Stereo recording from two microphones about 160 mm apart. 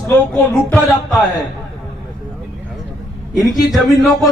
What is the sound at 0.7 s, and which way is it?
Speech, centre (ahead or behind).